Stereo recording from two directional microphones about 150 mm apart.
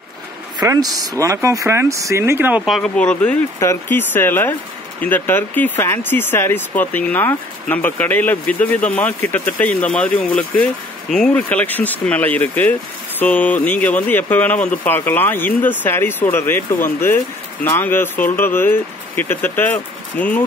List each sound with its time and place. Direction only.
0.6 s speech: 25° right (ahead or behind)
2.6 s speech: centre (ahead or behind)